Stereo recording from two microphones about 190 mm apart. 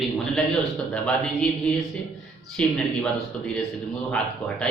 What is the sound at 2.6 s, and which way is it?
Speech, 5° left (ahead or behind).